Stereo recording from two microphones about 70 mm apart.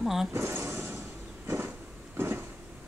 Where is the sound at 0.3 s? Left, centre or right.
Right.